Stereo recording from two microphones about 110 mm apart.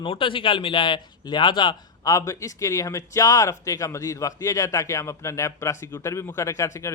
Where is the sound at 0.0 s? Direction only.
50° left (ahead or behind).